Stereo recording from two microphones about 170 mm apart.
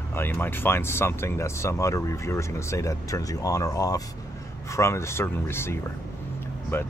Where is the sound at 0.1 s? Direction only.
15° left (ahead or behind).